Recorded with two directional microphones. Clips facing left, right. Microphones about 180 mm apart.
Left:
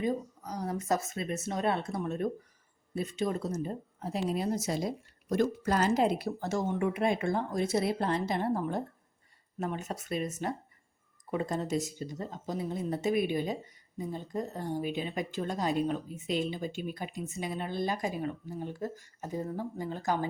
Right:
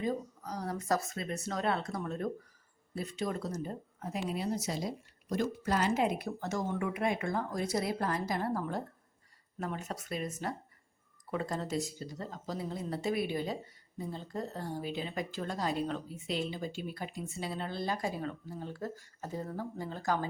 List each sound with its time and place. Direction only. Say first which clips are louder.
0.0 s speech: left 3 dB; 20° left (ahead or behind)